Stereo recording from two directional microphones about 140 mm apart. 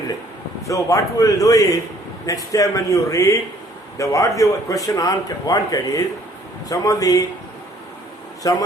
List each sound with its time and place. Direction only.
0.6 s a man's voice: 25° left (ahead or behind)
8.4 s a man's voice: 25° left (ahead or behind)